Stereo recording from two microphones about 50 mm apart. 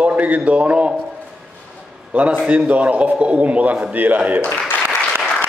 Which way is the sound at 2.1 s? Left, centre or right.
Right.